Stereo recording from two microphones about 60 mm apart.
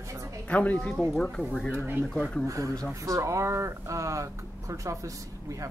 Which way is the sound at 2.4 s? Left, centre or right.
Right.